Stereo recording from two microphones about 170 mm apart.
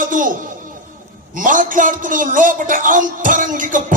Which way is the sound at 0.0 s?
50° right (ahead or behind).